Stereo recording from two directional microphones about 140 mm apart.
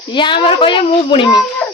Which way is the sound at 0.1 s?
35° left (ahead or behind).